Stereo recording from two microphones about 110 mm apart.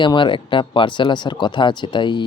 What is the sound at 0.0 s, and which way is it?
Speech, 45° left (ahead or behind).